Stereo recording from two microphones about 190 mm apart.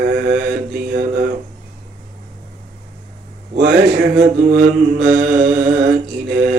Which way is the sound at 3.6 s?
65° right (ahead or behind).